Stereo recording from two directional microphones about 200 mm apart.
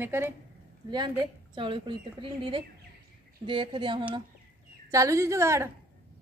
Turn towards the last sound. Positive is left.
turn(degrees=-15)  # may be behind; listen again after turning